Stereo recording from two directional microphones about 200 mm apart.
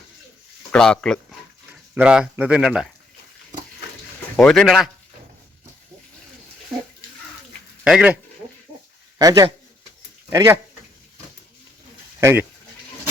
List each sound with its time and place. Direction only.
0.7 s speech: 5° left (ahead or behind)
4.4 s speech: 5° left (ahead or behind)
7.9 s speech: 5° right (ahead or behind)
9.1 s speech: 20° right (ahead or behind)
12.2 s speech: 10° right (ahead or behind)